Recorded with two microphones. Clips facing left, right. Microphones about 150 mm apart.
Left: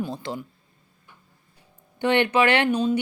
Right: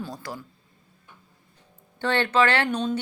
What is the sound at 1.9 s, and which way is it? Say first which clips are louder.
Speech: left 2 dB; 15° left (ahead or behind).